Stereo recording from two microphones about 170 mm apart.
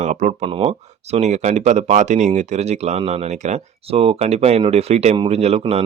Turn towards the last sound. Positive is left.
turn(degrees=-35)  # may be behind; listen again after turning